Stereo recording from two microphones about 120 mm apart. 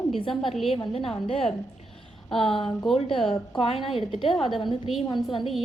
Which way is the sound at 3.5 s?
50° left (ahead or behind).